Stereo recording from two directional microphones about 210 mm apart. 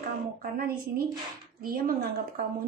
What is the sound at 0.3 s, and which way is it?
Speech, 45° right (ahead or behind).